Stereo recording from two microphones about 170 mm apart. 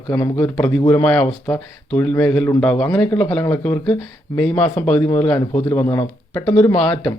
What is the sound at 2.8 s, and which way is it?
Speech, 25° left (ahead or behind).